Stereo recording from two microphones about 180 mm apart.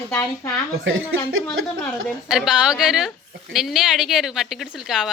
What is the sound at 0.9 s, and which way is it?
Speech, 90° right.